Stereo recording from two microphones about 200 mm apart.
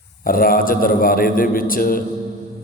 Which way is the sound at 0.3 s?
45° left (ahead or behind).